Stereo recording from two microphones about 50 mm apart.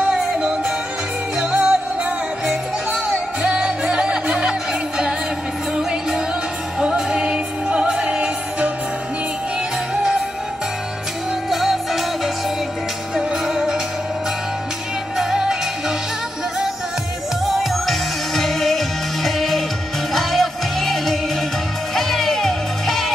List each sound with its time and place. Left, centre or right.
0.0 s music: centre
11.5 s music: centre
13.1 s music: centre
15.1 s music: centre
17.5 s music: centre